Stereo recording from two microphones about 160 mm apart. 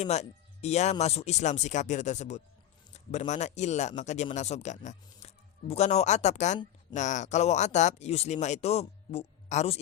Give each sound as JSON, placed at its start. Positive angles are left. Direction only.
{"t": 0.0, "sound": "speech", "side_deg": 45}